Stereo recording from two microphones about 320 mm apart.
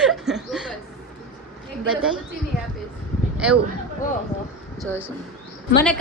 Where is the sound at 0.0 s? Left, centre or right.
Centre.